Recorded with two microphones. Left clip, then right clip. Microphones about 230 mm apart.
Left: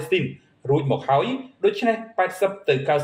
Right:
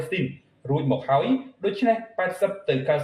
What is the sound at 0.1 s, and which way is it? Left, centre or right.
A man's voice, left.